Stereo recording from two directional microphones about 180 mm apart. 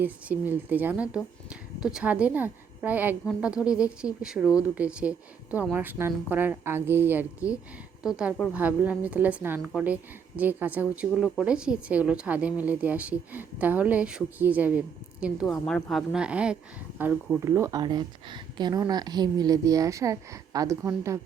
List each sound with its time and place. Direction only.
0.0 s speech: 10° right (ahead or behind)
17.4 s speech: 15° right (ahead or behind)